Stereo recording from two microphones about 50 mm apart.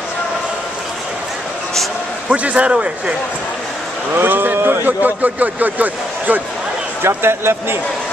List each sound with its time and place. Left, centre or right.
2.2 s a man's voice: right
4.1 s speech: right
7.0 s a man's voice: right